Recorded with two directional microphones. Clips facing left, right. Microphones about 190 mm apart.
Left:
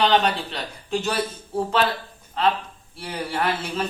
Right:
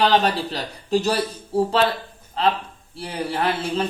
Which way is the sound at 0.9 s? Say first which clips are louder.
Right 4 dB; 35° right (ahead or behind).